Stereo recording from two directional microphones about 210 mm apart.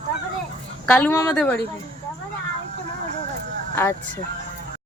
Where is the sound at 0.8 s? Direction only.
10° left (ahead or behind).